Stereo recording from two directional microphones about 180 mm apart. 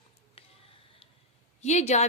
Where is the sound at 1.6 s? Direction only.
40° left (ahead or behind).